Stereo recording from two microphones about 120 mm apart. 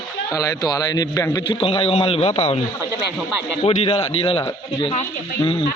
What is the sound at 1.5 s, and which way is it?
A man's voice, 50° left (ahead or behind).